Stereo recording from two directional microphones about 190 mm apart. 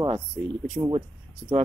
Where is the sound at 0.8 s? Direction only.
15° right (ahead or behind).